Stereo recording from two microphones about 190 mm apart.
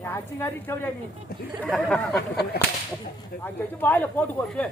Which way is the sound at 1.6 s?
Centre (ahead or behind).